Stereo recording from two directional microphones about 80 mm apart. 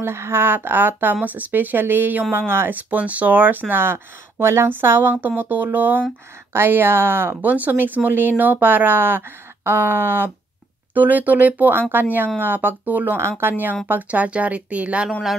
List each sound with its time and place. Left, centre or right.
0.0 s speech: right; by 15.0 s centre